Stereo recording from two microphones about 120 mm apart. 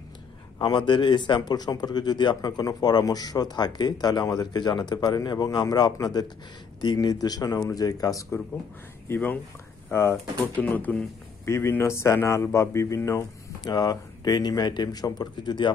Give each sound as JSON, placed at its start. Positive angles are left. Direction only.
{"t": 0.6, "sound": "speech", "side_deg": 40}
{"t": 9.0, "sound": "speech", "side_deg": 15}